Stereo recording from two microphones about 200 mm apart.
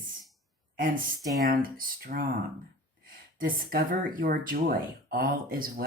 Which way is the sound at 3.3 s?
45° right (ahead or behind).